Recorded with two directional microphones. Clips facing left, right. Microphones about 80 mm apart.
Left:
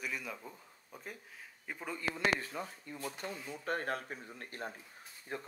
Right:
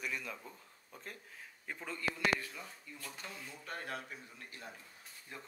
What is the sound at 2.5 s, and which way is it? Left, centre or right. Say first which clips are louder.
Speech: left 7 dB; left.